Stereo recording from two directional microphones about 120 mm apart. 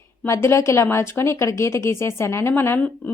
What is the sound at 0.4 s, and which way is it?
A woman's voice, 25° left (ahead or behind).